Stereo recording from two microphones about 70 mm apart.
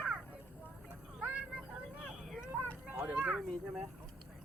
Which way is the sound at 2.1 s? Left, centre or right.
Centre.